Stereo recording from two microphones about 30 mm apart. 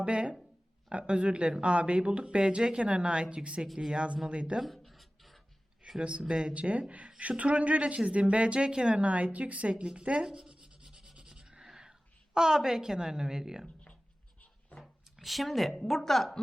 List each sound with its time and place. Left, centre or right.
0.0 s speech: right
4.6 s writing: centre
6.0 s speech: right
6.5 s speech: right
9.0 s speech: right
10.2 s speech: right
10.5 s rub: right
12.5 s a woman's voice: centre
14.8 s a sound: centre
15.8 s a woman's voice: centre